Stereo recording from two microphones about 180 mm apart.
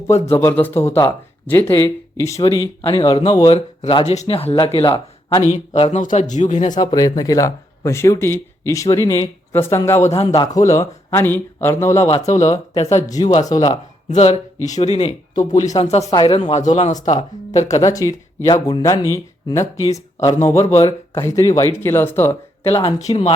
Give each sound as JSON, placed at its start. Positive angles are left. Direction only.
{"t": 0.3, "sound": "a man's voice", "side_deg": 10}
{"t": 6.7, "sound": "speech", "side_deg": 20}
{"t": 12.2, "sound": "speech", "side_deg": 40}
{"t": 13.1, "sound": "speech", "side_deg": 20}
{"t": 14.1, "sound": "speech", "side_deg": 35}
{"t": 17.7, "sound": "speech", "side_deg": 20}
{"t": 23.0, "sound": "speech", "side_deg": 40}